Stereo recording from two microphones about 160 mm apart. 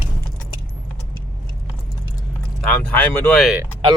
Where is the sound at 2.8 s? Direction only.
10° left (ahead or behind).